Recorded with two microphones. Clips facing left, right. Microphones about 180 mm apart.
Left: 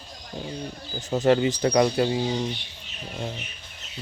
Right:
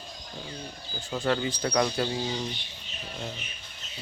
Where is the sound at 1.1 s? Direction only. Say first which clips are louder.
Left 8 dB; 20° left (ahead or behind).